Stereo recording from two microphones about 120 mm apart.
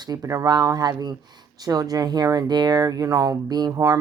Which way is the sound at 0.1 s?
25° right (ahead or behind).